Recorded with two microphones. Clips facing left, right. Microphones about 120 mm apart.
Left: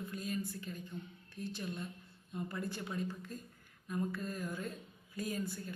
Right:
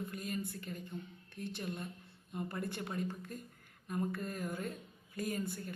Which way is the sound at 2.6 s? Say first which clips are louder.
Right 1 dB; 55° right (ahead or behind).